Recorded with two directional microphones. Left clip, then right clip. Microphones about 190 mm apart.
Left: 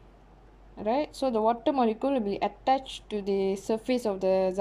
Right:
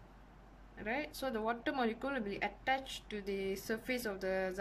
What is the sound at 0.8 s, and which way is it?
Speech, 15° left (ahead or behind).